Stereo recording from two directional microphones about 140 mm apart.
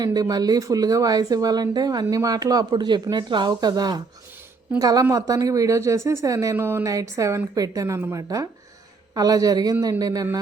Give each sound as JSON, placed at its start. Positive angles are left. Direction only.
{"t": 0.0, "sound": "speech", "side_deg": -30}